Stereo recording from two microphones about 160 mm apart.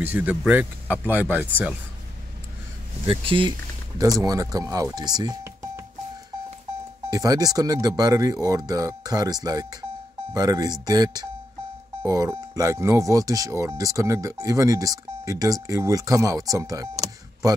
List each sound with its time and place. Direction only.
0.0 s speech: 10° right (ahead or behind)
3.1 s speech: 35° right (ahead or behind)
4.0 s speech: 20° right (ahead or behind)
7.1 s speech: 25° right (ahead or behind)